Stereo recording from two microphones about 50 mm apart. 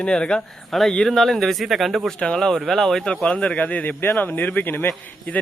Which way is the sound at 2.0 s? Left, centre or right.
Centre.